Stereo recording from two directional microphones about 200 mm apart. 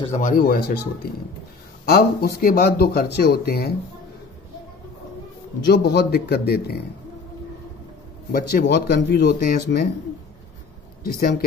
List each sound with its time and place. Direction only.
0.0 s speech: 35° left (ahead or behind)
1.9 s speech: 50° left (ahead or behind)
5.7 s speech: 55° left (ahead or behind)
8.3 s speech: 50° left (ahead or behind)
11.1 s speech: 50° left (ahead or behind)